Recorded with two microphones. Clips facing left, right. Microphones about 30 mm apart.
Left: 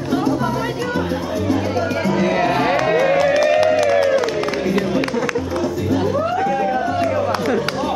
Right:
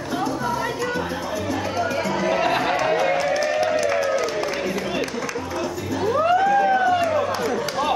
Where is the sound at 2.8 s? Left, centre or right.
Centre.